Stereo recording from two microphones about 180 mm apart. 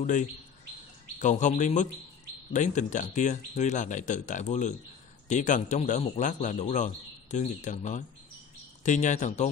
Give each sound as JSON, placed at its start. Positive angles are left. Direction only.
{"t": 0.0, "sound": "a man's voice", "side_deg": 45}